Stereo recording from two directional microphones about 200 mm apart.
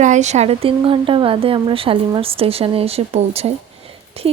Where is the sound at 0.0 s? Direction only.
35° right (ahead or behind).